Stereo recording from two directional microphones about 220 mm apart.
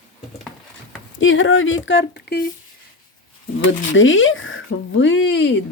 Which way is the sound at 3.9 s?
60° left (ahead or behind).